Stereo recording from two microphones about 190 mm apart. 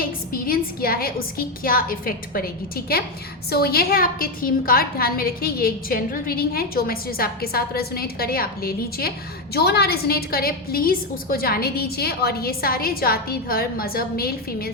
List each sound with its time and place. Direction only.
0.0 s a woman's voice: 50° left (ahead or behind)